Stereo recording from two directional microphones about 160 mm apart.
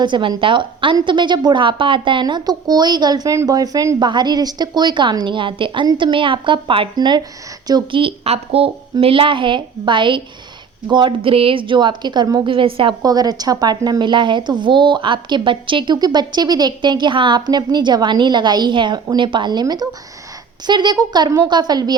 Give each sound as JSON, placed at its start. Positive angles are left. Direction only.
{"t": 0.0, "sound": "a woman's voice", "side_deg": -30}